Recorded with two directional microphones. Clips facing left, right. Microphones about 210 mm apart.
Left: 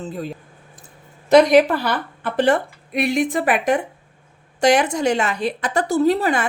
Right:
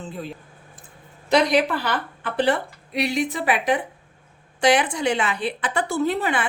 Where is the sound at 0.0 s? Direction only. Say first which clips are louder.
Left 4 dB; 40° left (ahead or behind).